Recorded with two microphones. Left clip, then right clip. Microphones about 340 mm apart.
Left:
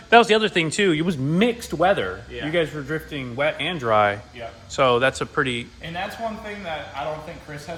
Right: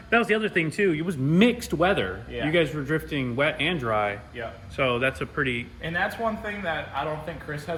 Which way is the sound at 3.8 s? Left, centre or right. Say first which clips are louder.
Left 9 dB; left.